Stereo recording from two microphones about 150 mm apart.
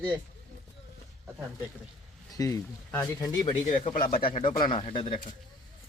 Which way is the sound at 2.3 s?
20° left (ahead or behind).